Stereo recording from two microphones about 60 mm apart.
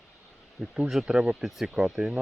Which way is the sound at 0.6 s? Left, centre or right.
Centre.